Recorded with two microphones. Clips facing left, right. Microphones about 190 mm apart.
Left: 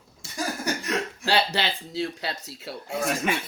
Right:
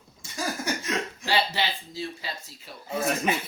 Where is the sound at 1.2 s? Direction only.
80° left.